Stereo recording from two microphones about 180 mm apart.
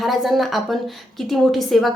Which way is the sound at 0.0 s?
Centre (ahead or behind).